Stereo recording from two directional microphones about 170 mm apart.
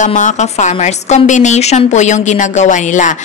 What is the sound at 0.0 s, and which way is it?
A woman's voice, 45° left (ahead or behind).